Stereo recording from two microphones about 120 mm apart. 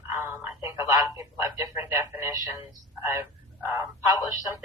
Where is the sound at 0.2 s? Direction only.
25° right (ahead or behind).